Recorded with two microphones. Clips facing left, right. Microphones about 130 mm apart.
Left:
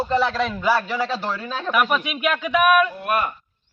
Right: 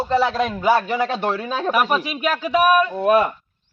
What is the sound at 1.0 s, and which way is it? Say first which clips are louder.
A man's voice: right 4 dB; 55° right (ahead or behind).